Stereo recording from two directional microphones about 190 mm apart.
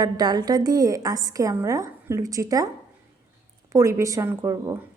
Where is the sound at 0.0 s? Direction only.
20° right (ahead or behind).